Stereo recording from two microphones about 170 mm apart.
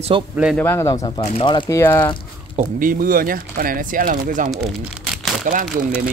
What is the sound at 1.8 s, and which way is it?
Speech, 15° left (ahead or behind).